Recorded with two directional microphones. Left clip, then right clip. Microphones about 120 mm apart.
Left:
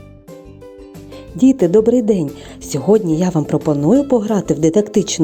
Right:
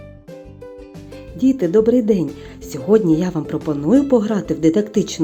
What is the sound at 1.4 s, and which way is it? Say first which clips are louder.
Speech: left 3 dB; 50° left (ahead or behind).